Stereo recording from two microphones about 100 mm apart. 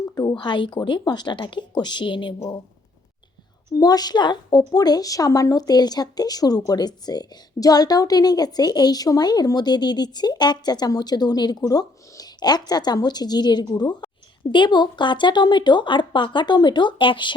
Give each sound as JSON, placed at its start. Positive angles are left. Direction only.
{"t": 0.2, "sound": "a woman's voice", "side_deg": 45}
{"t": 3.7, "sound": "a woman's voice", "side_deg": 40}